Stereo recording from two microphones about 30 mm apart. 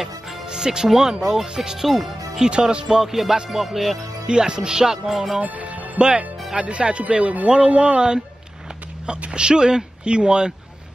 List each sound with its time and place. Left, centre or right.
0.5 s speech: right
1.3 s music: right
1.8 s speech: centre
2.4 s speech: right
2.9 s music: centre
4.3 s music: right; by 5.4 s centre
5.4 s music: right
5.9 s speech: right
9.3 s speech: right